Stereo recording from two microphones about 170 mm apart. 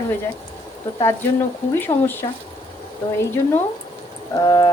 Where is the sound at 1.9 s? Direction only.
25° left (ahead or behind).